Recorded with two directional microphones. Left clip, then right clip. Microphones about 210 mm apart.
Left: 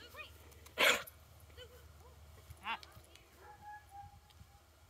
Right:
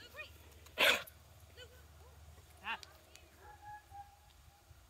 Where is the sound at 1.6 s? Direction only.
35° right (ahead or behind).